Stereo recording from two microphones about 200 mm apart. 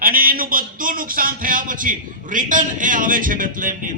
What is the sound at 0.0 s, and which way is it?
A man's voice, 45° right (ahead or behind).